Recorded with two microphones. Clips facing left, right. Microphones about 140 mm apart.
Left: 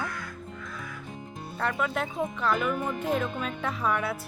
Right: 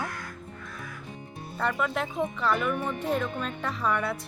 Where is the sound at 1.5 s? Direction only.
Centre (ahead or behind).